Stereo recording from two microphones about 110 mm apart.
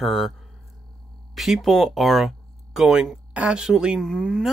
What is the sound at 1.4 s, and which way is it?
Speech, centre (ahead or behind).